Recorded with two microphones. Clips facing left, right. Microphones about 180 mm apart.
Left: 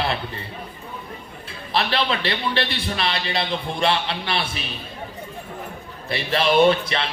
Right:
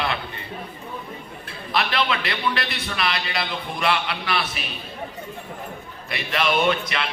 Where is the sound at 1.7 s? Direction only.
30° left (ahead or behind).